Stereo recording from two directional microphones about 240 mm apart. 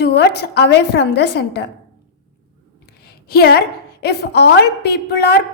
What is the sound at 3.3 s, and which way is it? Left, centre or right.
A woman's voice, left.